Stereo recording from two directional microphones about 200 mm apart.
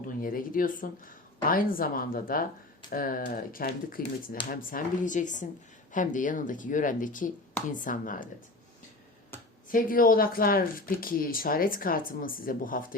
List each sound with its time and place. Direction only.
0.2 s speech: 45° left (ahead or behind)
9.6 s speech: 45° left (ahead or behind)